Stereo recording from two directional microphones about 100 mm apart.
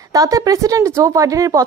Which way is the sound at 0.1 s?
35° right (ahead or behind).